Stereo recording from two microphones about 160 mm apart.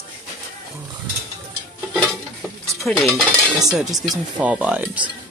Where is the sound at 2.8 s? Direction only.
5° left (ahead or behind).